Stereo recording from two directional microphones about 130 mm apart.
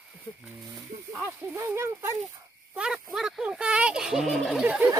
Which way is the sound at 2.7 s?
5° right (ahead or behind).